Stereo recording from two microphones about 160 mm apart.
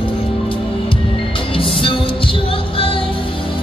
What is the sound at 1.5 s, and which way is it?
Music, 35° left (ahead or behind).